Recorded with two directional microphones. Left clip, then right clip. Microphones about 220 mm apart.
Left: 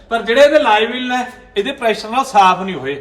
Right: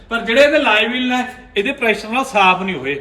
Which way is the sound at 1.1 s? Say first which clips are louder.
Even; 15° left (ahead or behind).